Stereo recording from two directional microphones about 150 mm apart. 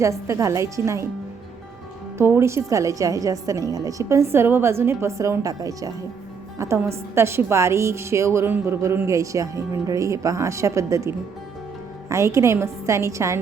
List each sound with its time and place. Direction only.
0.0 s a woman's voice: 20° right (ahead or behind)
2.1 s a woman's voice: 15° right (ahead or behind)